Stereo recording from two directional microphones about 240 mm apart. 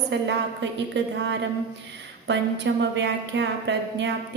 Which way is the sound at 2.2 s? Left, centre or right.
Right.